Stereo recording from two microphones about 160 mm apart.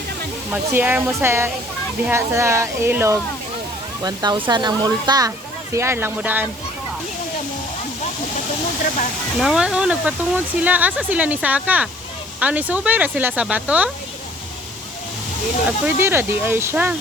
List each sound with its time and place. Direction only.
0.5 s speech: 10° right (ahead or behind)
4.0 s speech: 25° right (ahead or behind); by 6.5 s 10° right (ahead or behind)
9.4 s speech: 5° right (ahead or behind)
16.0 s speech: 15° right (ahead or behind)